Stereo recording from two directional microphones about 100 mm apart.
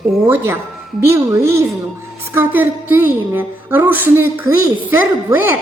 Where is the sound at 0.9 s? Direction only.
30° right (ahead or behind).